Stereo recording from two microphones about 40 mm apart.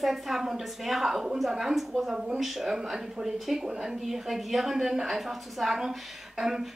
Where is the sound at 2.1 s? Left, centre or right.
Centre.